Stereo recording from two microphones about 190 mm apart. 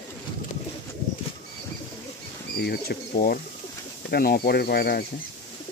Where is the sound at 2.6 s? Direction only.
55° left (ahead or behind).